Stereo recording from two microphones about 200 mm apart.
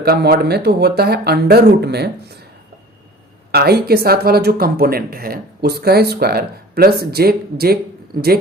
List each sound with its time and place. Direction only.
0.0 s speech: 50° right (ahead or behind)
3.5 s speech: 50° right (ahead or behind)